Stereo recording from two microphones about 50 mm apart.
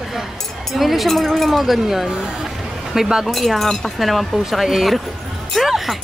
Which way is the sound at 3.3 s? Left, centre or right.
Centre.